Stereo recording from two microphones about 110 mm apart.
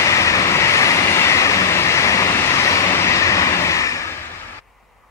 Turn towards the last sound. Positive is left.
turn(degrees=30)  # may be behind; listen again after turning